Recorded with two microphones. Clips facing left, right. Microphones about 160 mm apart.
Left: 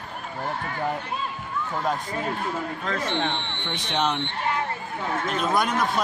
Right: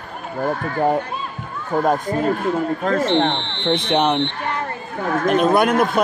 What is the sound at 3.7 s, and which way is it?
Speech, 60° right (ahead or behind).